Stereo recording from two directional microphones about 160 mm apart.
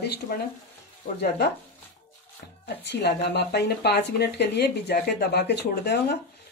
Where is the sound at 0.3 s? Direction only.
65° left (ahead or behind).